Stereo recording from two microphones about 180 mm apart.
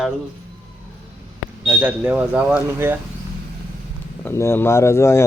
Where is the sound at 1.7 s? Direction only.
10° right (ahead or behind).